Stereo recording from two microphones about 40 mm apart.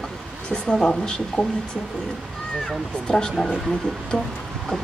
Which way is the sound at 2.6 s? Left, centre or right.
Centre.